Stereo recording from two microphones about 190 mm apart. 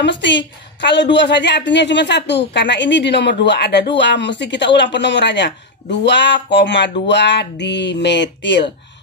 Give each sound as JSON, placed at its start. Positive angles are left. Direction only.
{"t": 0.0, "sound": "a woman's voice", "side_deg": 70}